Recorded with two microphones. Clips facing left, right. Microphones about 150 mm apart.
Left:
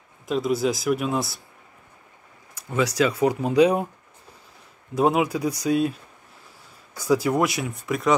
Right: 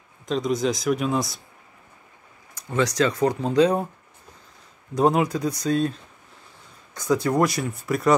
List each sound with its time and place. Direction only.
0.3 s speech: 5° left (ahead or behind)
2.7 s speech: 5° left (ahead or behind)
4.9 s speech: 5° left (ahead or behind)